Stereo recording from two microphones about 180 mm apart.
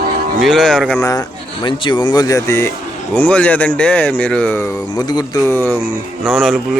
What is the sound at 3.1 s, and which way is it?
Speech, 10° left (ahead or behind).